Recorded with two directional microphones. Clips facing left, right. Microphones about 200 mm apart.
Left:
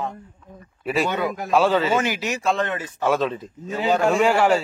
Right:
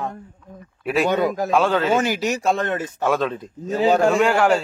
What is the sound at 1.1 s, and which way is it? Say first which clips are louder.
Speech: right 5 dB; 45° right (ahead or behind).